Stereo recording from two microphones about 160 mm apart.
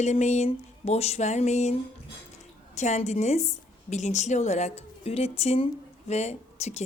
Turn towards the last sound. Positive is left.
turn(degrees=45)  # may be behind; listen again after turning